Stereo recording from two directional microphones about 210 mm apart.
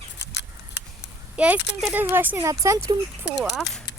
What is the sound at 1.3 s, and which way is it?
Speech, 5° right (ahead or behind).